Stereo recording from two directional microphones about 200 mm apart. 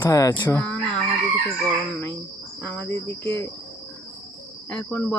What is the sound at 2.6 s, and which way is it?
Speech, 10° left (ahead or behind).